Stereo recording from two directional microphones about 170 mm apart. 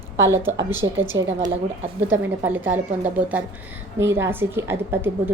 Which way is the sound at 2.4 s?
10° right (ahead or behind).